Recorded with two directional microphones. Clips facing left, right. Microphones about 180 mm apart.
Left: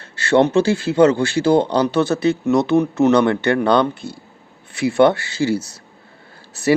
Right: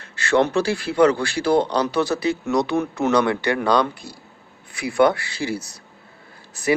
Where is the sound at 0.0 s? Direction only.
30° left (ahead or behind).